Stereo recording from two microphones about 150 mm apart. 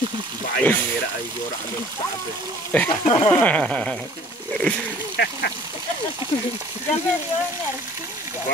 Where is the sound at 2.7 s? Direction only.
10° left (ahead or behind).